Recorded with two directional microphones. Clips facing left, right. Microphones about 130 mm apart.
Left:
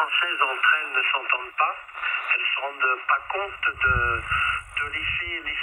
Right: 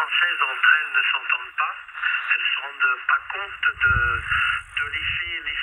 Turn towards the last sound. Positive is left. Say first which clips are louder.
# even
turn(degrees=45)  # may be behind; listen again after turning